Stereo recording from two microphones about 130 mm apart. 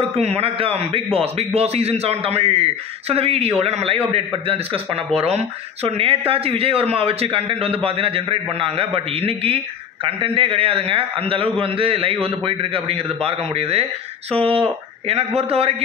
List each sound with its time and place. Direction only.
0.1 s a man's voice: 50° right (ahead or behind)